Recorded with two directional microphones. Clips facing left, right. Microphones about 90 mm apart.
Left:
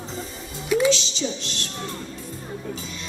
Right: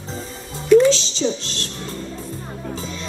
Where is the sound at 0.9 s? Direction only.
35° right (ahead or behind).